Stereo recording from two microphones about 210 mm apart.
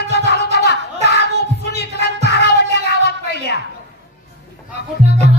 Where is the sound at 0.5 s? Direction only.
50° left (ahead or behind).